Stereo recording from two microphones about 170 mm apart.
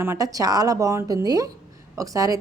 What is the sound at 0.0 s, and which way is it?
A woman's voice, 15° right (ahead or behind).